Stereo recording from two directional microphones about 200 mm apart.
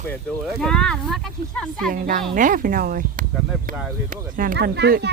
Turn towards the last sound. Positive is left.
turn(degrees=-55)  # may be behind; listen again after turning